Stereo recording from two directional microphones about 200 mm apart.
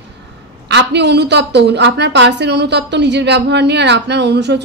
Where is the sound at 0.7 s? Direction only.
60° right (ahead or behind).